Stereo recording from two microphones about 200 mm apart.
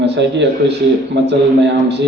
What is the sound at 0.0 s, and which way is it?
A man's voice, 60° right (ahead or behind).